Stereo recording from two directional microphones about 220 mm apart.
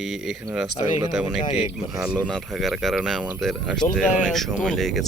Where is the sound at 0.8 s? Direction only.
25° left (ahead or behind).